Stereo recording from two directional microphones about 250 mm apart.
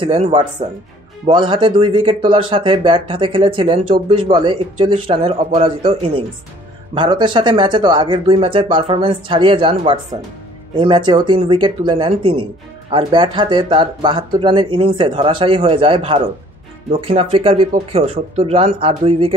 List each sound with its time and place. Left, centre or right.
0.0 s speech: right